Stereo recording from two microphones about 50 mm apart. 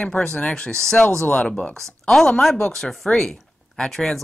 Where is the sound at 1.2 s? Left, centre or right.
Left.